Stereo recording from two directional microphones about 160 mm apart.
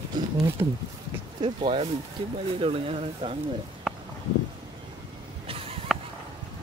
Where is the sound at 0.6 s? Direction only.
30° right (ahead or behind).